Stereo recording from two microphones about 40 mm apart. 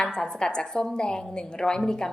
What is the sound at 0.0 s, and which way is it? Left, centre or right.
A woman's voice, centre.